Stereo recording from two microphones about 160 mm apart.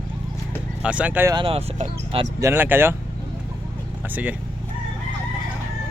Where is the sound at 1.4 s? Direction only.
35° right (ahead or behind).